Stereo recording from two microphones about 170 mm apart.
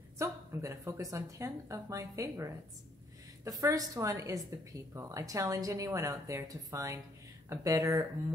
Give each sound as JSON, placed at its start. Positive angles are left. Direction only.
{"t": 0.2, "sound": "a woman's voice", "side_deg": -15}